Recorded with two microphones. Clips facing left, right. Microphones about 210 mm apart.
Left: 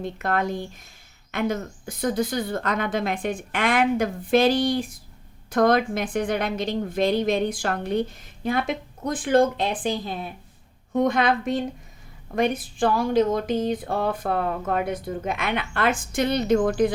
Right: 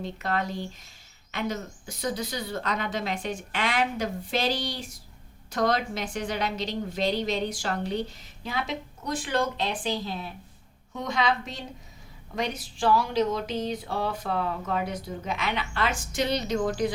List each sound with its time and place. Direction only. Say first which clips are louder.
0.0 s a woman's voice: left 4 dB; 50° left (ahead or behind)